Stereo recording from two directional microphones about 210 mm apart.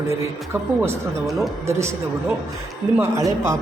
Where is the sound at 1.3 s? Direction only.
Centre (ahead or behind).